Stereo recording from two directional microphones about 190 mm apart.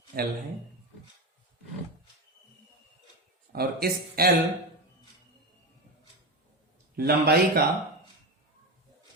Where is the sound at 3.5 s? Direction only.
55° right (ahead or behind).